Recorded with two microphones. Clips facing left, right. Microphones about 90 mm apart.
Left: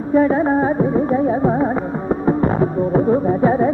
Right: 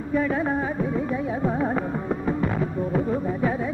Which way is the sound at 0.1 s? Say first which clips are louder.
Left 9 dB; 35° left (ahead or behind).